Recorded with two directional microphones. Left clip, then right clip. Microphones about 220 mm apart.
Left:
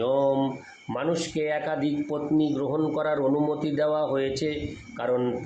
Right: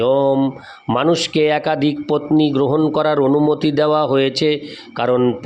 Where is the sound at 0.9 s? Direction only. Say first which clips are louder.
Right 11 dB; 50° right (ahead or behind).